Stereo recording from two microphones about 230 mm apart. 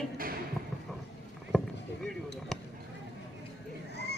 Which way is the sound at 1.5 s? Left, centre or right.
Centre.